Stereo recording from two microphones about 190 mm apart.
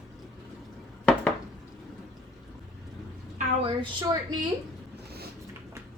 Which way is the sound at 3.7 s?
20° right (ahead or behind).